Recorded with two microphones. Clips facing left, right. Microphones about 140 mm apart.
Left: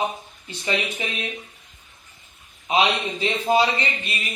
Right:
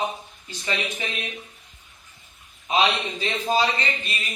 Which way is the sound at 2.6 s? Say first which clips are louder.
Left 1 dB; 15° left (ahead or behind).